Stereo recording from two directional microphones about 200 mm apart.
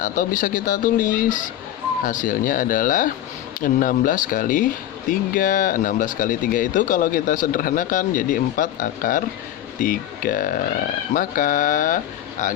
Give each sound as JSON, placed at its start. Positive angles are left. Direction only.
{"t": 0.0, "sound": "speech", "side_deg": 40}